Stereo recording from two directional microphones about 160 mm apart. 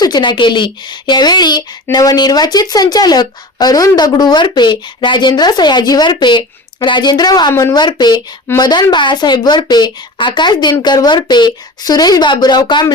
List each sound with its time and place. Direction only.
0.0 s speech: 25° left (ahead or behind)